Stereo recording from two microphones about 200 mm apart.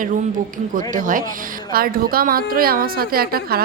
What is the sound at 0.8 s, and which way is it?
A woman's voice, 40° right (ahead or behind).